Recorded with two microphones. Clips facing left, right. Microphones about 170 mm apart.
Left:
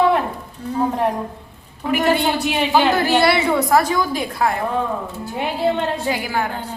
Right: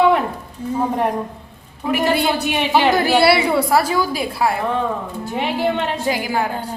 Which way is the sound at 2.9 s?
10° right (ahead or behind).